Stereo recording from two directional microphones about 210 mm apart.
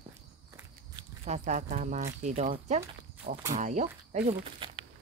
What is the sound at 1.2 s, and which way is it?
Speech, 35° right (ahead or behind).